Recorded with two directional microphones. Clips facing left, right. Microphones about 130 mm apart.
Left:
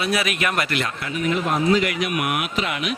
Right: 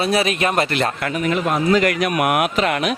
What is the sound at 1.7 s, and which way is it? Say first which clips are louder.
Speech: right 5 dB; 50° right (ahead or behind).